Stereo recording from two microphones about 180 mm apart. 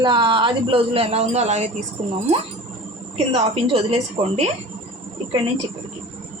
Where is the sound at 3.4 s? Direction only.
35° right (ahead or behind).